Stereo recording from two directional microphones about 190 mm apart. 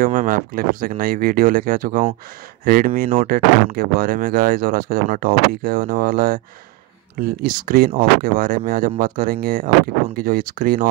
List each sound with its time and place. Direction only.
0.0 s speech: 45° right (ahead or behind)